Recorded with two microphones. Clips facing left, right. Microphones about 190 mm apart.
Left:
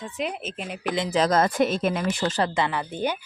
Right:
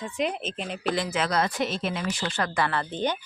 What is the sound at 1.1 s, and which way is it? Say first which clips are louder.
Speech: left 5 dB; 40° left (ahead or behind).